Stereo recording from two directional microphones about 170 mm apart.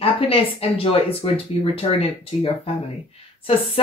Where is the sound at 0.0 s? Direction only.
35° left (ahead or behind).